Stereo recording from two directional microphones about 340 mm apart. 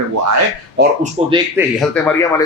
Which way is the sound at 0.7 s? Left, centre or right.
Centre.